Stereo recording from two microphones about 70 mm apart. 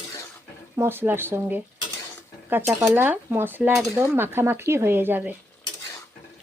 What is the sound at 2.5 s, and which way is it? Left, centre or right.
Cutlery, right.